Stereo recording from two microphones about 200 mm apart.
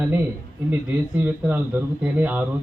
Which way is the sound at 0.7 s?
10° right (ahead or behind).